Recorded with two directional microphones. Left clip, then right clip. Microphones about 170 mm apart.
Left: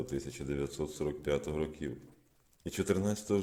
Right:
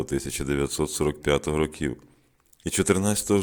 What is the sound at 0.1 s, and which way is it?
Speech, 40° right (ahead or behind).